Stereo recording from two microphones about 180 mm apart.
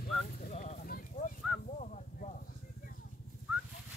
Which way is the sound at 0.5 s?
40° left (ahead or behind).